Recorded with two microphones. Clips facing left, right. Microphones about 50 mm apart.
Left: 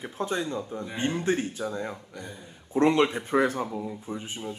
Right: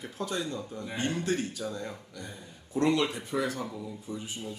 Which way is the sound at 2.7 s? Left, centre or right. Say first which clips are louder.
Left 5 dB; left.